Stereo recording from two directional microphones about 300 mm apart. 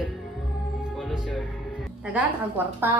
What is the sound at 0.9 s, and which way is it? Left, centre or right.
A woman's voice, centre.